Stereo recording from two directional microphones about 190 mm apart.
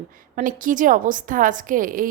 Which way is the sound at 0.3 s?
45° right (ahead or behind).